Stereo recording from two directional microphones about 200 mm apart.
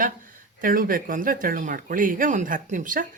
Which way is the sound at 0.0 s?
45° right (ahead or behind).